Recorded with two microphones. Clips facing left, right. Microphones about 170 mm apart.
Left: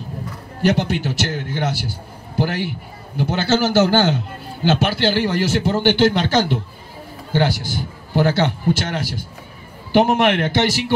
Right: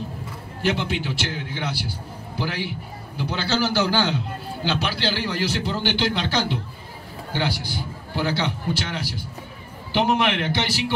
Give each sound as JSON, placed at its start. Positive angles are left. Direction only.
{"t": 0.6, "sound": "a man's voice", "side_deg": 45}